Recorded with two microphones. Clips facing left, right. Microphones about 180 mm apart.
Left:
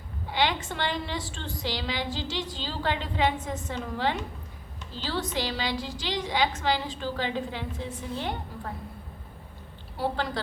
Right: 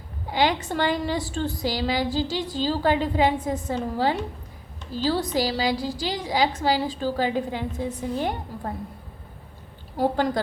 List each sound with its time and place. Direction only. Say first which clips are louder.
0.3 s a woman's voice: right 5 dB; 40° right (ahead or behind)
10.0 s a woman's voice: right 7 dB; 45° right (ahead or behind)